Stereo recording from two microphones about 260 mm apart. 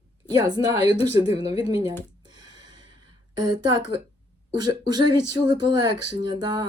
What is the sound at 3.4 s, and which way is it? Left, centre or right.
Speech, centre.